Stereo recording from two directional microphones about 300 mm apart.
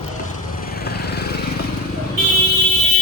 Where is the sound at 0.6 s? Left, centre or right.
Left.